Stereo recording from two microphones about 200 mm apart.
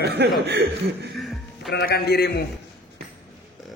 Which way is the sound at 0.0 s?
55° right (ahead or behind).